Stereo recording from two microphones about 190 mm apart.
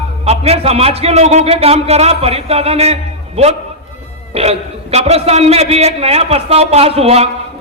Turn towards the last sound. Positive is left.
turn(degrees=-30)  # may be behind; listen again after turning